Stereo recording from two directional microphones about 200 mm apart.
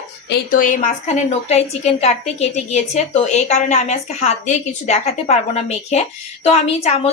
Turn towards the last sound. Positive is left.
turn(degrees=30)  # may be behind; listen again after turning